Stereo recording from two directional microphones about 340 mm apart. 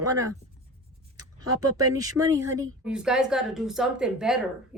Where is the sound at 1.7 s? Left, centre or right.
Centre.